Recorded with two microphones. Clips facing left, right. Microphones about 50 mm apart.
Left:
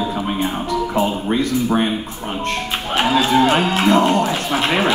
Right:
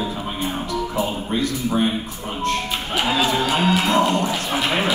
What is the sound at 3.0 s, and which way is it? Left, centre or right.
Speech, left.